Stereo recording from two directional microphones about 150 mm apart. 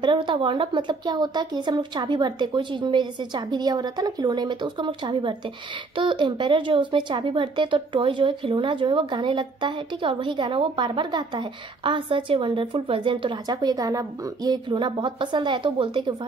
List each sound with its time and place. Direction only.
0.0 s speech: 30° right (ahead or behind)